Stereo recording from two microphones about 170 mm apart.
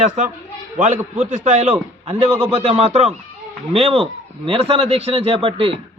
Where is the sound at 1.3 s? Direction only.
40° right (ahead or behind).